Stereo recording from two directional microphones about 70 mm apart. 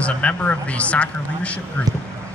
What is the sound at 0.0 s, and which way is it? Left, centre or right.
Speech, centre.